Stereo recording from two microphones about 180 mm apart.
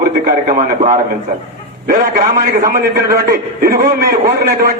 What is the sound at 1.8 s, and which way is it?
A man's voice, 55° right (ahead or behind).